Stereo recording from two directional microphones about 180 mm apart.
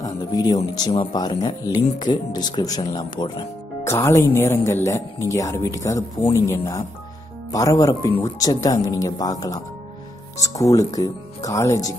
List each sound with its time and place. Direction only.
0.0 s speech: 20° left (ahead or behind)